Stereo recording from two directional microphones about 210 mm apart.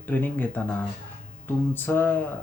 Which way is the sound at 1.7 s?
10° left (ahead or behind).